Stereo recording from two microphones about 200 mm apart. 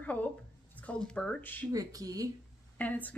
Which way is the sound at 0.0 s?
5° left (ahead or behind).